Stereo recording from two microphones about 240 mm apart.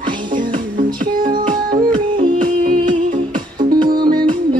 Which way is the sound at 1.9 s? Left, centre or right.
Right.